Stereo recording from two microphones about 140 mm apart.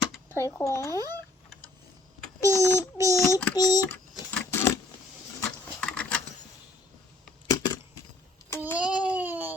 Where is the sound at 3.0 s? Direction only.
20° right (ahead or behind).